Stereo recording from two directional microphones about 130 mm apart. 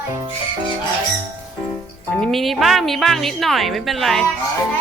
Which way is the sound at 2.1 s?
5° left (ahead or behind).